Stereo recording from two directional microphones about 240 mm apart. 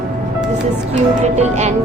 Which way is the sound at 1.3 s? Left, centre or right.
Right.